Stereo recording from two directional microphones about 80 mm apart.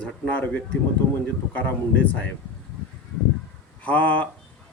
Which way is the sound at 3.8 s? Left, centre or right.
Centre.